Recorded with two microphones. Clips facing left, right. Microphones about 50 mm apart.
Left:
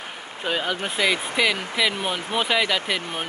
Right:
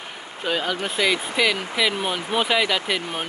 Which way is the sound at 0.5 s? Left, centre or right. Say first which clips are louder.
Right 1 dB; centre.